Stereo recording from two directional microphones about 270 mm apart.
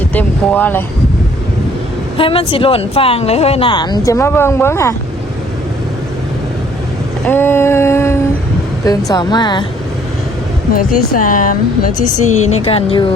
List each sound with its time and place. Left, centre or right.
0.1 s speech: centre
2.1 s speech: centre
7.3 s a sound: centre
11.1 s speech: left